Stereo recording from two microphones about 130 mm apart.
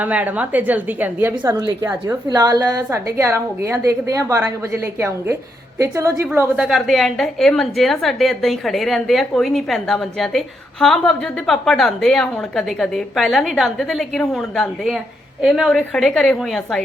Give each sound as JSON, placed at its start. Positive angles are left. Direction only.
{"t": 0.0, "sound": "a woman's voice", "side_deg": -10}
{"t": 1.5, "sound": "a woman's voice", "side_deg": -25}
{"t": 6.6, "sound": "a woman's voice", "side_deg": 0}